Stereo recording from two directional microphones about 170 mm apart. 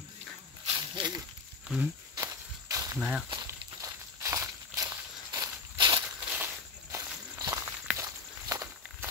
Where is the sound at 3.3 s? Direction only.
20° right (ahead or behind).